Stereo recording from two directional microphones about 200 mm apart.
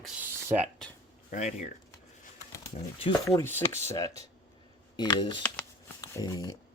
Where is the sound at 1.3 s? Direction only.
35° left (ahead or behind).